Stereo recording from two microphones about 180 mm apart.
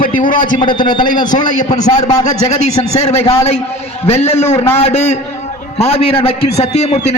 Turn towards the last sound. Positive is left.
turn(degrees=40)  # may be behind; listen again after turning